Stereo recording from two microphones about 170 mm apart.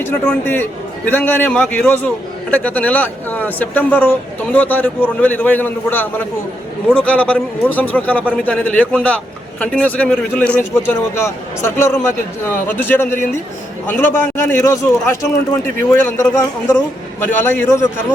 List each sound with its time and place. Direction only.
0.0 s a man's voice: 10° left (ahead or behind)
14.4 s a man's voice: 15° left (ahead or behind)